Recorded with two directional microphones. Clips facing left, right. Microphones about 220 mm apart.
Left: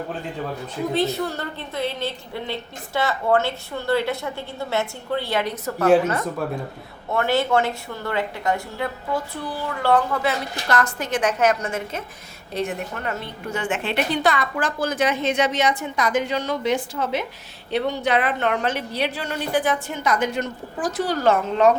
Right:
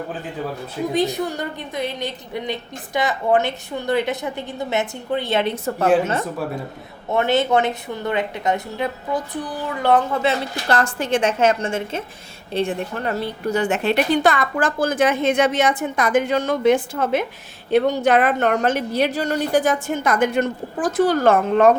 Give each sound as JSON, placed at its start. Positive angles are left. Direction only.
{"t": 0.9, "sound": "a woman's voice", "side_deg": -15}
{"t": 7.1, "sound": "a woman's voice", "side_deg": -20}